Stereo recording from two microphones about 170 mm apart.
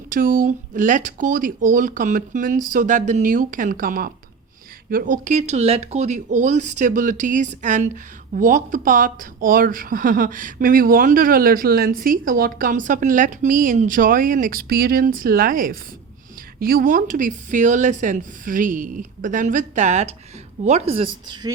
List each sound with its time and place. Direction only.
0.1 s speech: 55° right (ahead or behind); by 21.5 s 30° right (ahead or behind)